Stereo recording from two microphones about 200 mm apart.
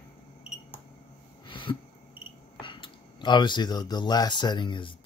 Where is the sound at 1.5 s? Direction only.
25° left (ahead or behind).